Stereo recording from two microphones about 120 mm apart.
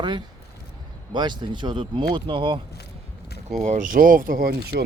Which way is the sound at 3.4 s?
75° right (ahead or behind).